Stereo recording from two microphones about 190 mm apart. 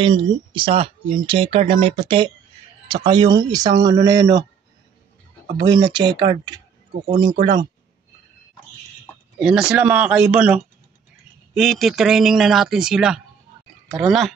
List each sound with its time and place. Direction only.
0.0 s speech: 25° right (ahead or behind)
5.7 s speech: 25° right (ahead or behind)
9.4 s speech: 5° right (ahead or behind)